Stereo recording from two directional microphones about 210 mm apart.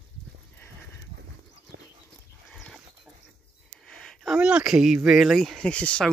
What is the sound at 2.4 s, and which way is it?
Dog, centre (ahead or behind).